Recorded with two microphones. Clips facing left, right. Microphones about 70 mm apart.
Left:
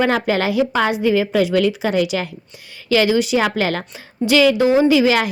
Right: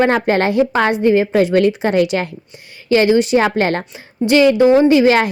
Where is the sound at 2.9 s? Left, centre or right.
Right.